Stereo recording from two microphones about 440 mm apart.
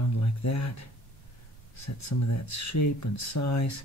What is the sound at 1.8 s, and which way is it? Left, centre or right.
Speech, left.